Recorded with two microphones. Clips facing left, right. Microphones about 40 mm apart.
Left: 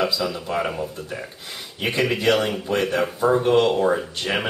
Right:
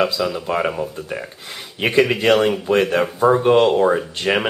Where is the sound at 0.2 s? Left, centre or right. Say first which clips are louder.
Right 4 dB; centre.